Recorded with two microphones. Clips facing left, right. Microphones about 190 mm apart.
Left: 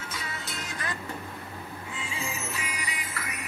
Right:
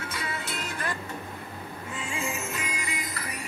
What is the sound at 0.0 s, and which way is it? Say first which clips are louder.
Music: right 4 dB; 60° right (ahead or behind).